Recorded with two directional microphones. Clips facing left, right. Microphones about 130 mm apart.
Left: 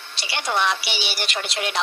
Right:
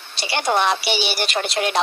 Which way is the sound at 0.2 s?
45° right (ahead or behind).